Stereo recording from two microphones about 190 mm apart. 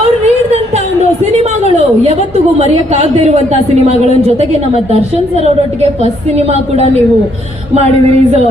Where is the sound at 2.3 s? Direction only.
35° right (ahead or behind).